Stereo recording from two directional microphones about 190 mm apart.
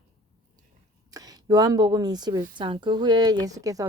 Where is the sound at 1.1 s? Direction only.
20° right (ahead or behind).